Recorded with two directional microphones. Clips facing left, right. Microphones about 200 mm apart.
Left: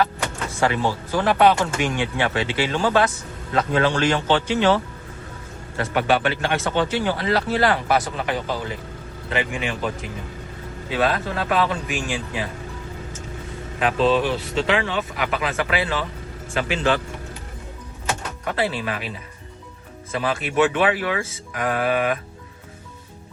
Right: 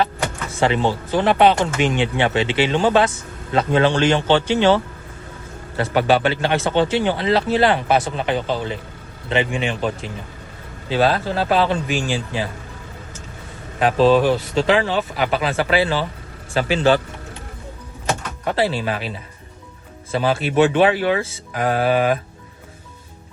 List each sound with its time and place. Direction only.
0.6 s speech: 25° right (ahead or behind)
13.7 s speech: 40° right (ahead or behind)
18.4 s speech: 30° right (ahead or behind)